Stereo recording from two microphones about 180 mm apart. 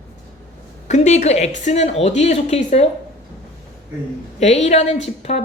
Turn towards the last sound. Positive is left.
turn(degrees=35)  # may be behind; listen again after turning